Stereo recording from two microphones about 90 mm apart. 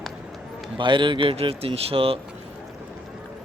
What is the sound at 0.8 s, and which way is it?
Speech, 65° right (ahead or behind).